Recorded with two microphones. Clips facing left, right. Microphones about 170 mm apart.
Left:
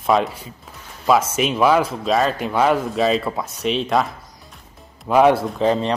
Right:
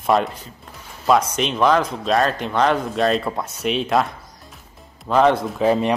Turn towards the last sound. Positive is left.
turn(degrees=-10)  # may be behind; listen again after turning